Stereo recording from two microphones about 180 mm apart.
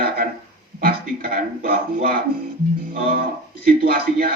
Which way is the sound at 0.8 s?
55° right (ahead or behind).